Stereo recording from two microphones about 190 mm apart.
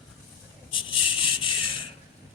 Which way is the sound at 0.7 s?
25° left (ahead or behind).